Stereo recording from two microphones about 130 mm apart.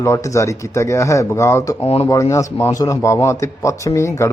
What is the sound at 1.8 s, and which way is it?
Speech, 50° left (ahead or behind).